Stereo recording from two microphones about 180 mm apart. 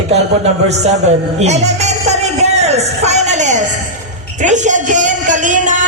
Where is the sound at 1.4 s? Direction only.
40° right (ahead or behind).